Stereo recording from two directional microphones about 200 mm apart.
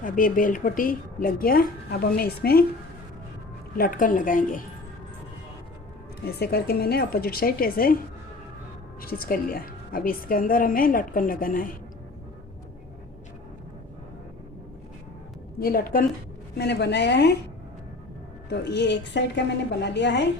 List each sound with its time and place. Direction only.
0.0 s a woman's voice: 45° left (ahead or behind)
3.8 s a woman's voice: 45° left (ahead or behind)
6.2 s a woman's voice: 50° left (ahead or behind)
9.0 s a woman's voice: 45° left (ahead or behind)
15.5 s a woman's voice: 45° left (ahead or behind)
16.6 s a woman's voice: 55° left (ahead or behind)
18.4 s a woman's voice: 60° left (ahead or behind)